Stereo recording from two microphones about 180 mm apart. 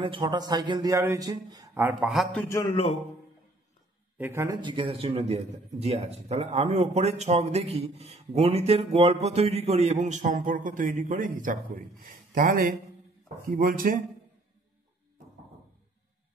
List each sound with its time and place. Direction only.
0.0 s a man's voice: 25° right (ahead or behind); by 2.2 s 5° right (ahead or behind)
2.7 s a man's voice: 30° left (ahead or behind)
4.2 s a man's voice: 15° right (ahead or behind); by 14.0 s 50° right (ahead or behind)